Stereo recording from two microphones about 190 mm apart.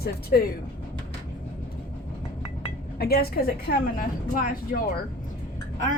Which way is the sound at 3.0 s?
55° left (ahead or behind).